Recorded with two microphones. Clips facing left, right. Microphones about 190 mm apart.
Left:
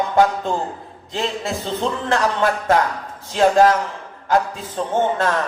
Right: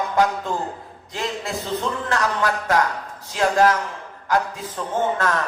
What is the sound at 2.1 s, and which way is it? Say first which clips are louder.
Speech: left 4 dB; 30° left (ahead or behind).